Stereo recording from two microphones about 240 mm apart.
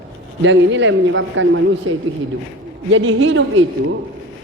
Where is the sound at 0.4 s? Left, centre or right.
Right.